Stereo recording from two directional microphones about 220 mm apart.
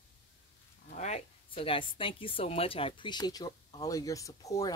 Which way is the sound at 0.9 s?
30° left (ahead or behind).